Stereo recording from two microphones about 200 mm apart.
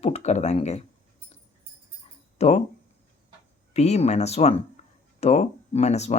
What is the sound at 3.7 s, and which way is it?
Speech, 35° left (ahead or behind).